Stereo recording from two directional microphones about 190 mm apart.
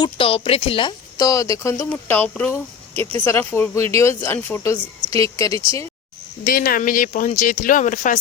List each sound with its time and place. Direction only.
0.0 s speech: 30° left (ahead or behind)
6.4 s speech: 50° left (ahead or behind)